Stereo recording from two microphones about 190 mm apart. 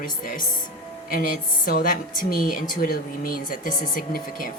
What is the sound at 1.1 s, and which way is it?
Speech, 50° left (ahead or behind).